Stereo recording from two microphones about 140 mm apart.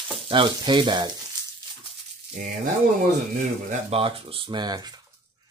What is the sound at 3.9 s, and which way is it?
Speech, 40° right (ahead or behind).